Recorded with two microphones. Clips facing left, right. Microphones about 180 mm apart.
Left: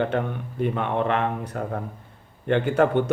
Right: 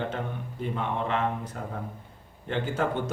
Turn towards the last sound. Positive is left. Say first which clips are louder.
# left 8 dB
turn(degrees=65)  # may be behind; listen again after turning